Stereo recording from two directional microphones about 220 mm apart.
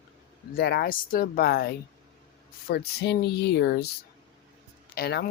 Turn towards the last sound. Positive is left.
turn(degrees=45)  # may be behind; listen again after turning